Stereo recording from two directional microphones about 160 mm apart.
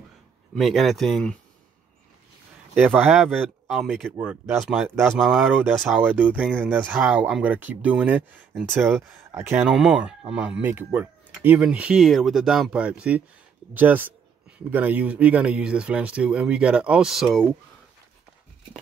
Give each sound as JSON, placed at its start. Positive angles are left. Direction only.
{"t": 0.6, "sound": "speech", "side_deg": 0}
{"t": 2.7, "sound": "speech", "side_deg": -10}
{"t": 9.6, "sound": "speech", "side_deg": 0}